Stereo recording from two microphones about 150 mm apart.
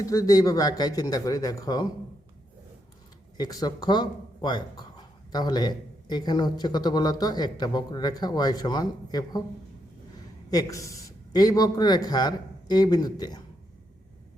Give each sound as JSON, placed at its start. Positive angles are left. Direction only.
{"t": 0.0, "sound": "speech", "side_deg": 20}
{"t": 3.3, "sound": "speech", "side_deg": 25}
{"t": 10.5, "sound": "speech", "side_deg": 25}